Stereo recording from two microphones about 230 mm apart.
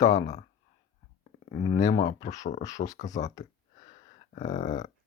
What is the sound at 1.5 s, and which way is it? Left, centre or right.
Speech, left.